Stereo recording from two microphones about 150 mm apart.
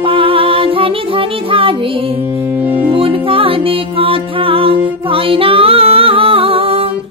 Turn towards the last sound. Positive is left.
turn(degrees=-40)  # may be behind; listen again after turning